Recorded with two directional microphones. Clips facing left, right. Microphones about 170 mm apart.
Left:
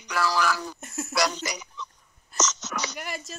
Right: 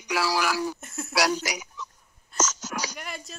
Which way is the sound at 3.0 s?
Centre (ahead or behind).